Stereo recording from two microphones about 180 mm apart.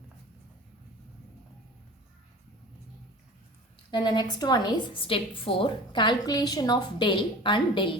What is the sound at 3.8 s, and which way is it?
A woman's voice, 25° left (ahead or behind).